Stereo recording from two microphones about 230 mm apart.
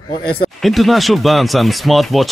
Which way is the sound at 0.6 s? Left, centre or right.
Centre.